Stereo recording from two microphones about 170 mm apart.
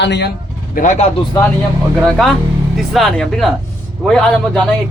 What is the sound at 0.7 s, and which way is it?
Speech, 50° left (ahead or behind).